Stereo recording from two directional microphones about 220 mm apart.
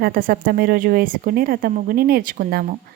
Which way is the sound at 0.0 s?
40° right (ahead or behind).